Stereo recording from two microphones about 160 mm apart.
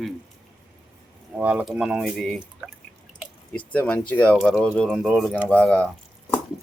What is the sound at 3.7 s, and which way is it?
Speech, 10° left (ahead or behind).